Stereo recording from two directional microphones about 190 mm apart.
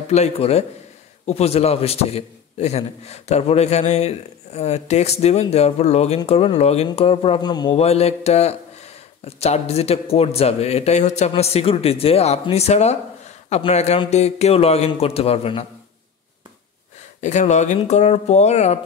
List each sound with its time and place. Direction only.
0.1 s a man's voice: 35° left (ahead or behind)
7.7 s a man's voice: 35° left (ahead or behind)
17.2 s a man's voice: 40° left (ahead or behind)